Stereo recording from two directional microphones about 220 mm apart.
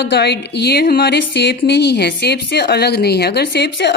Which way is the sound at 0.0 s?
50° left (ahead or behind).